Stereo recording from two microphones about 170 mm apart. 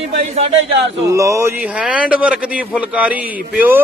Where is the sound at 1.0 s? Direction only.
20° right (ahead or behind).